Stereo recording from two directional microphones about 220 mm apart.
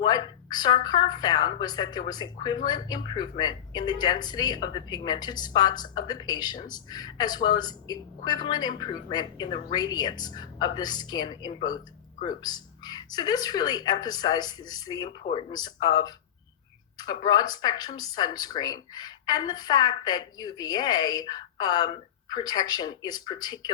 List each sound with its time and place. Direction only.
0.0 s a woman's voice: 20° left (ahead or behind)